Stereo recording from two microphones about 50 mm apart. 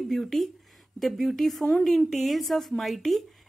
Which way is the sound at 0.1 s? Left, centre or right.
Centre.